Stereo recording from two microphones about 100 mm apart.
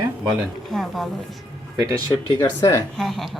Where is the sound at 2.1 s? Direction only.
25° left (ahead or behind).